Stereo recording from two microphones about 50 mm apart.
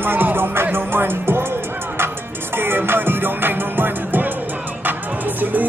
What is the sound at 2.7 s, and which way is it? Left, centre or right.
Music, right.